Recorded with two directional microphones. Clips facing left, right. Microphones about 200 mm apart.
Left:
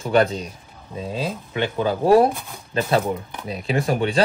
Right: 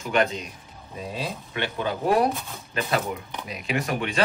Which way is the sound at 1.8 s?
30° left (ahead or behind).